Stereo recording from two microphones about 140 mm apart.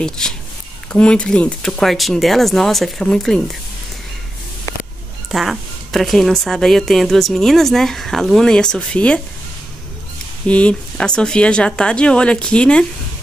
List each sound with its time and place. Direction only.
0.2 s a woman's voice: 5° left (ahead or behind)
5.3 s a woman's voice: centre (ahead or behind)
10.4 s speech: 5° left (ahead or behind)